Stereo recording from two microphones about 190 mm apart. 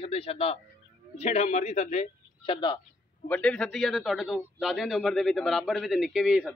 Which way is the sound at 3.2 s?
5° left (ahead or behind).